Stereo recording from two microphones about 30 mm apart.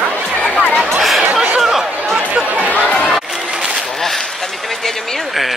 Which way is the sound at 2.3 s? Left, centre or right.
Right.